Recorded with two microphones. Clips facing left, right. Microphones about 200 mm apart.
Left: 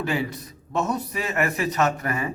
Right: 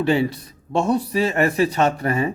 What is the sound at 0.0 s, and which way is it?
A man's voice, 30° right (ahead or behind).